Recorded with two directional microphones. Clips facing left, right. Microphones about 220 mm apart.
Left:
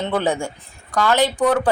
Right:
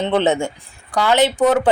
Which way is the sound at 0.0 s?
25° right (ahead or behind).